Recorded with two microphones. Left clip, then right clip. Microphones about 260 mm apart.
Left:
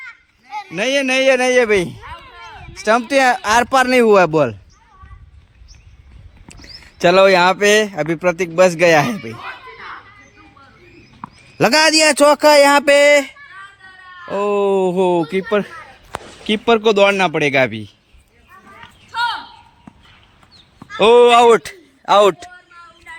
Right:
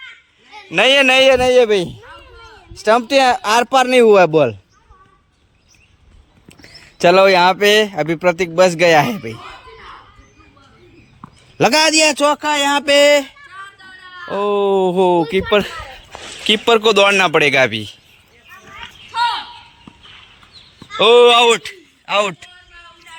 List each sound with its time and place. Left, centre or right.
0.7 s a man's voice: centre
6.5 s a man's voice: centre
11.2 s a sound: centre
12.8 s a man's voice: centre
20.9 s speech: centre
21.5 s a man's voice: left